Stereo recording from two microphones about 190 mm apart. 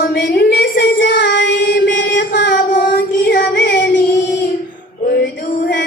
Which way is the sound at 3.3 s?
55° left (ahead or behind).